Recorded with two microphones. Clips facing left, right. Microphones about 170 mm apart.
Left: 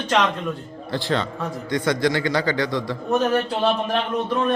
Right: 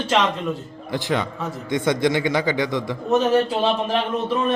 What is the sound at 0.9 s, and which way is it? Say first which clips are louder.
A man's voice: even; 15° right (ahead or behind).